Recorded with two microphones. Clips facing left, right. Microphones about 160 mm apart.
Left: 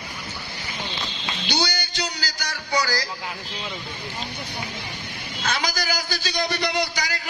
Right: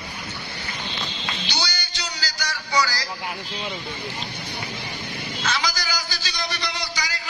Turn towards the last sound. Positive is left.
turn(degrees=55)  # may be behind; listen again after turning